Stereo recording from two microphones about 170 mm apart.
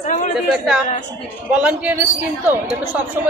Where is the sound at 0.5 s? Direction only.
Centre (ahead or behind).